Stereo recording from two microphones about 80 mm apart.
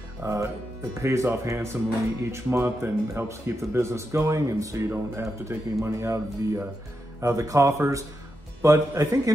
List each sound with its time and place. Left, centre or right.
0.2 s speech: right
4.8 s speech: right